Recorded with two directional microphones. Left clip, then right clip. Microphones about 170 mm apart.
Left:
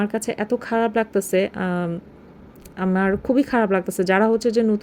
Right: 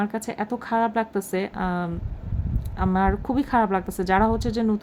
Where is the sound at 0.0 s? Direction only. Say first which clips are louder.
Left 4 dB; 10° left (ahead or behind).